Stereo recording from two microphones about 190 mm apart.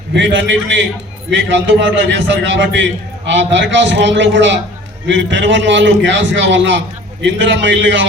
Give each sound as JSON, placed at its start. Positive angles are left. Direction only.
{"t": 0.1, "sound": "a man's voice", "side_deg": -70}